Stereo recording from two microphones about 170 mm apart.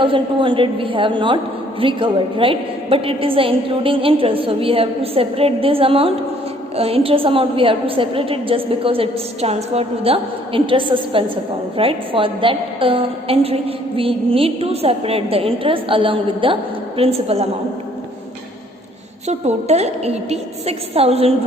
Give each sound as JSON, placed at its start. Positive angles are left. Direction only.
{"t": 0.0, "sound": "a woman's voice", "side_deg": -30}
{"t": 19.3, "sound": "a woman's voice", "side_deg": -40}